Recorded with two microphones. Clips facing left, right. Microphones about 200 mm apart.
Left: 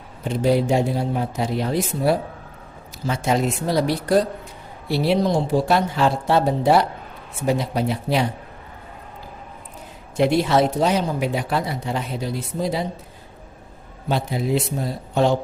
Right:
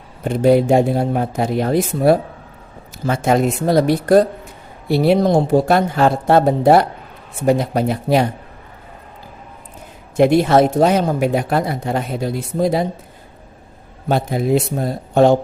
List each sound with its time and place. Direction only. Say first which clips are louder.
0.3 s speech: right 6 dB; 55° right (ahead or behind)
10.2 s speech: right 5 dB; 50° right (ahead or behind)
14.1 s speech: right 5 dB; 50° right (ahead or behind)